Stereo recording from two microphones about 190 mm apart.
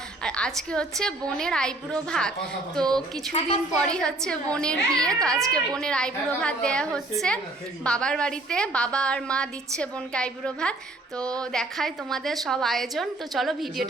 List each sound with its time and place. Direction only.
0.2 s a woman's voice: 5° left (ahead or behind)
3.3 s a woman's voice: 35° left (ahead or behind)
3.8 s a woman's voice: 5° left (ahead or behind)